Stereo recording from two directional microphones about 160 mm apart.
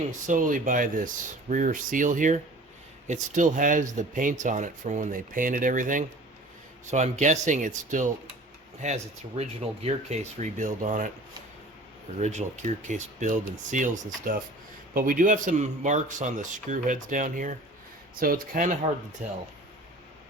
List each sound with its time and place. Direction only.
0.3 s speech: 55° right (ahead or behind)
12.2 s speech: 45° right (ahead or behind)